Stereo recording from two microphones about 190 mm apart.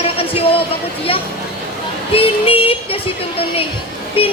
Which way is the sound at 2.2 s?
30° left (ahead or behind).